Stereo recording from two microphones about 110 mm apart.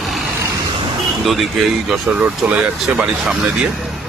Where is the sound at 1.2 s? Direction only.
Centre (ahead or behind).